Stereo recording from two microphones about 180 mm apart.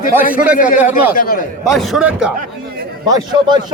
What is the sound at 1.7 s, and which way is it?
Speech, centre (ahead or behind).